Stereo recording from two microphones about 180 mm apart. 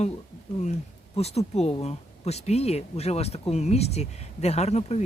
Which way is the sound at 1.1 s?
35° left (ahead or behind).